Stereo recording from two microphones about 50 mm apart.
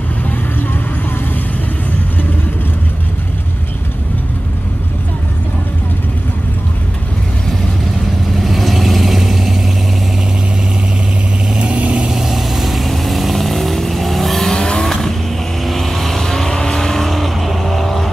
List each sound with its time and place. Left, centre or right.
8.4 s vehicle: centre
11.5 s vehicle: right
12.1 s vehicle: centre
14.5 s vehicle: centre